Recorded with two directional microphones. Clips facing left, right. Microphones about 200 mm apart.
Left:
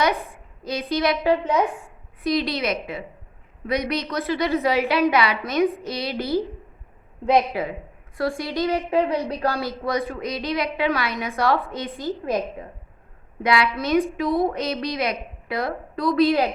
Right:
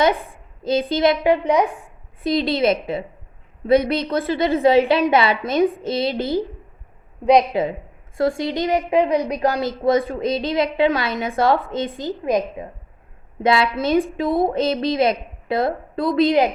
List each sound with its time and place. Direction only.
0.6 s a woman's voice: 25° right (ahead or behind)
1.0 s a woman's voice: 15° right (ahead or behind)
2.2 s a woman's voice: 25° right (ahead or behind)